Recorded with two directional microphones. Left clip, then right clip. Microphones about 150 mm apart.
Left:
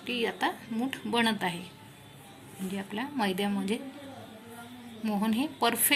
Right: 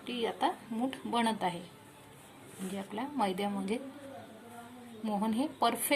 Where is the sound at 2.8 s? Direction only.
25° right (ahead or behind).